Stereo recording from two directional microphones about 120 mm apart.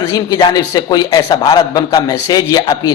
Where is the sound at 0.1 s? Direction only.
30° left (ahead or behind).